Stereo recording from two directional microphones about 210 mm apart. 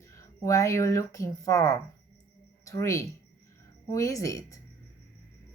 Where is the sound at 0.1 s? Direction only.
15° left (ahead or behind).